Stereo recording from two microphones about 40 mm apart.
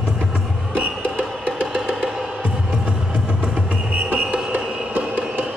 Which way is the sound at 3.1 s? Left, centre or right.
Right.